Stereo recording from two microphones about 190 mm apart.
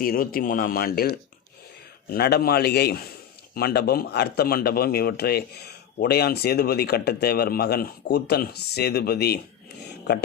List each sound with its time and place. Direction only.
0.0 s speech: 50° left (ahead or behind)